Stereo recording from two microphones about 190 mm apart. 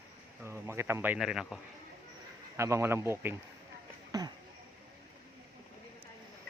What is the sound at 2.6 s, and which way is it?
Speech, 15° right (ahead or behind).